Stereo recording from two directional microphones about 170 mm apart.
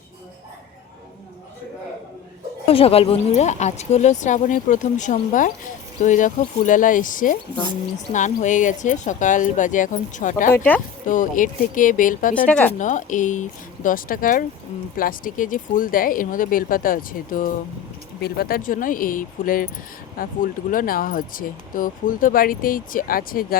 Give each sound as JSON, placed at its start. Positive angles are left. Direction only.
{"t": 2.6, "sound": "a woman's voice", "side_deg": 35}
{"t": 10.5, "sound": "speech", "side_deg": 10}
{"t": 11.0, "sound": "a woman's voice", "side_deg": 50}
{"t": 12.5, "sound": "speech", "side_deg": 5}
{"t": 12.8, "sound": "a woman's voice", "side_deg": 45}